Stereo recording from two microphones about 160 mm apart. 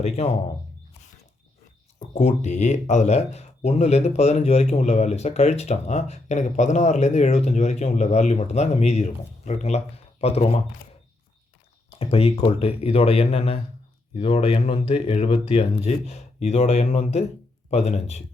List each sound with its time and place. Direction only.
0.0 s speech: 40° left (ahead or behind)
2.1 s speech: 45° left (ahead or behind)
11.9 s speech: 40° left (ahead or behind)